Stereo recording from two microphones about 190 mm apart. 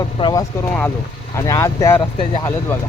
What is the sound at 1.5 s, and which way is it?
Speech, 15° left (ahead or behind).